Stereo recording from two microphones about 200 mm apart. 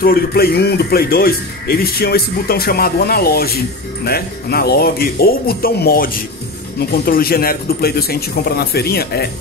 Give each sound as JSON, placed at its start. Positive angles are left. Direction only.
{"t": 0.0, "sound": "speech", "side_deg": 50}